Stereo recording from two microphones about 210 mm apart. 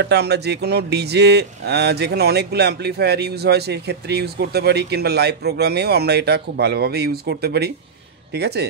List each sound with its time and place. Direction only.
0.0 s speech: 50° right (ahead or behind)